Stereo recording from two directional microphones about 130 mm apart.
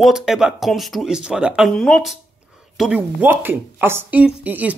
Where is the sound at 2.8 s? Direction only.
10° right (ahead or behind).